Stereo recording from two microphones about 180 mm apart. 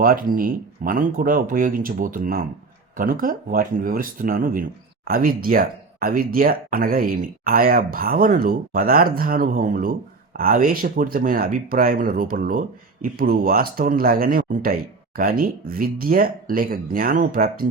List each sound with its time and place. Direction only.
0.0 s speech: 50° right (ahead or behind)